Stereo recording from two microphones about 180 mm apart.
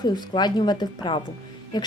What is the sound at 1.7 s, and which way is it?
Music, 25° left (ahead or behind).